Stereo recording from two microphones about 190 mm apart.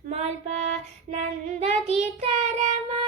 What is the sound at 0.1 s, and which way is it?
Child singing, 35° right (ahead or behind).